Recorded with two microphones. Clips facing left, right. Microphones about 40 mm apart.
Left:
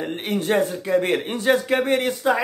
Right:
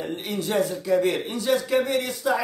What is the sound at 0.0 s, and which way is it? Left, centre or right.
A man's voice, left.